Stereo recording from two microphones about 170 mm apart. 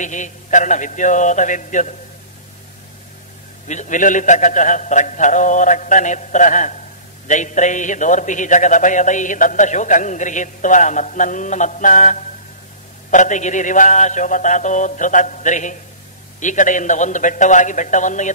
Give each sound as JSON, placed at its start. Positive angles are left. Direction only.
{"t": 0.0, "sound": "a man's voice", "side_deg": 45}
{"t": 3.6, "sound": "a man's voice", "side_deg": 45}